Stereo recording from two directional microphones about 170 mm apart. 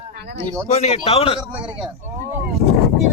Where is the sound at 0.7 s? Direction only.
40° left (ahead or behind).